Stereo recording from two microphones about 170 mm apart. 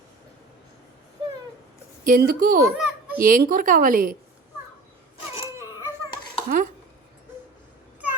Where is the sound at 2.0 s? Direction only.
60° right (ahead or behind).